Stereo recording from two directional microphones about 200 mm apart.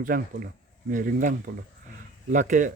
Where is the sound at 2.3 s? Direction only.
40° right (ahead or behind).